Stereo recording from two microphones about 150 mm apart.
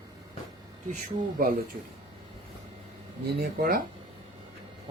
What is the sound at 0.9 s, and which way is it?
Speech, 70° right (ahead or behind).